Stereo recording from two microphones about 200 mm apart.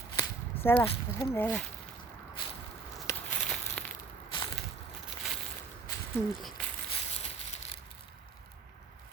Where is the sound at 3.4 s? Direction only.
Centre (ahead or behind).